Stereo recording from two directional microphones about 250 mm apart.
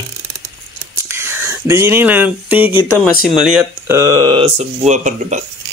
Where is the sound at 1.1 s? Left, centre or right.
Centre; by 5.4 s right.